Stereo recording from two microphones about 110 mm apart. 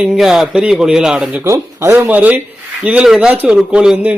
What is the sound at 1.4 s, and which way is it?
Speech, 25° right (ahead or behind).